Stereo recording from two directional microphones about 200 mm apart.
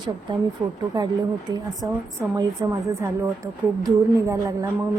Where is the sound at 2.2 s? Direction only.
15° right (ahead or behind).